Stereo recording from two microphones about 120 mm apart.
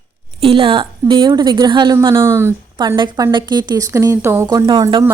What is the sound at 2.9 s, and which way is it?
A woman's voice, 35° right (ahead or behind).